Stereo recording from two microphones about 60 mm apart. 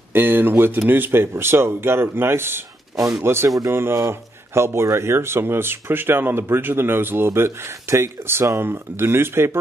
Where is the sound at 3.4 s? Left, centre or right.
Right.